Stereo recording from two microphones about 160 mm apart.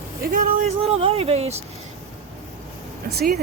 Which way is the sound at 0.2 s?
65° right (ahead or behind).